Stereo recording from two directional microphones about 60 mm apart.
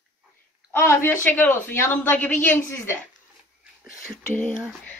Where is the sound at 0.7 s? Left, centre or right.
Left.